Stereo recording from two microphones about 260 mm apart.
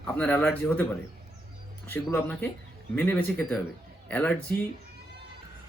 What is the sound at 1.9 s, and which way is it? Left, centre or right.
Speech, centre.